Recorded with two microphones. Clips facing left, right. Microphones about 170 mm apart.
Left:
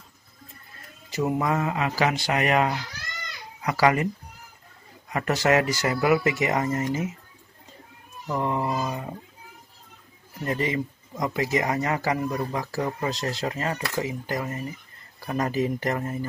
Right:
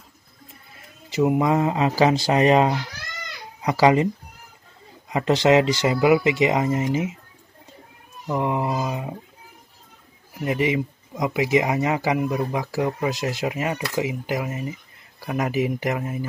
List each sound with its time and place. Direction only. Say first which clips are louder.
1.1 s speech: right 5 dB; 15° right (ahead or behind)
5.1 s speech: right 5 dB; 20° right (ahead or behind)
8.3 s speech: right 3 dB; 15° right (ahead or behind)
10.4 s speech: right 4 dB; 15° right (ahead or behind)